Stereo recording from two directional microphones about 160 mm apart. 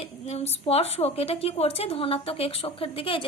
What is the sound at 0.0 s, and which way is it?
A woman's voice, 40° left (ahead or behind).